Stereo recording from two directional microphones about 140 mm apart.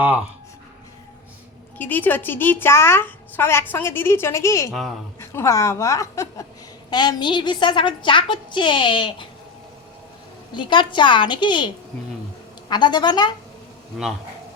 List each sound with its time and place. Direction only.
1.8 s a woman's voice: 15° left (ahead or behind); by 9.2 s 35° left (ahead or behind)
10.5 s a woman's voice: 35° left (ahead or behind)